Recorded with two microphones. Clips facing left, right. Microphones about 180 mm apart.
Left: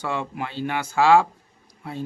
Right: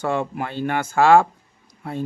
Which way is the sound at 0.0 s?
45° right (ahead or behind).